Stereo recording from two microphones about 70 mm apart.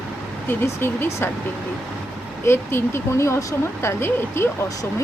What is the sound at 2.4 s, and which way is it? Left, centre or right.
Speech, left.